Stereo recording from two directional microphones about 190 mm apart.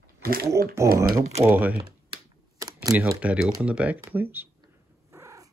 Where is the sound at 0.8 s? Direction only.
15° right (ahead or behind).